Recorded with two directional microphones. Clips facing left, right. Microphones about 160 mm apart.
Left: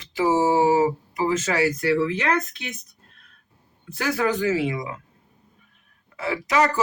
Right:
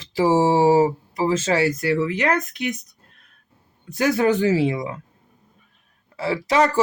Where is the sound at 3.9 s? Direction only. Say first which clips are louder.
Right 5 dB; 25° right (ahead or behind).